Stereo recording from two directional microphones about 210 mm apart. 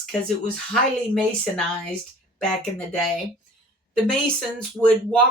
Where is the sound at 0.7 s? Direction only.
Centre (ahead or behind).